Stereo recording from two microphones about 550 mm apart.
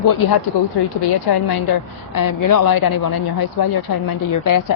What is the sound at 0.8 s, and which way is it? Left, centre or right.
Speech, left.